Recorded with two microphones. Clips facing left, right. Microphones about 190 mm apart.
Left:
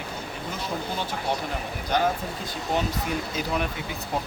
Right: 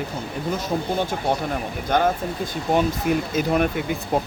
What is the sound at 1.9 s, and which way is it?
Speech, 50° right (ahead or behind).